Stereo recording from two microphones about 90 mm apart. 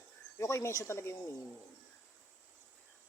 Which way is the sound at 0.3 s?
35° left (ahead or behind).